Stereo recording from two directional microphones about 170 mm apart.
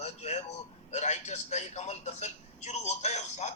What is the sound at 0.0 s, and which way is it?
A man's voice, 40° left (ahead or behind).